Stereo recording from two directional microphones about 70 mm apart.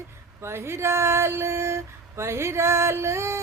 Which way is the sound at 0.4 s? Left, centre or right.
Right.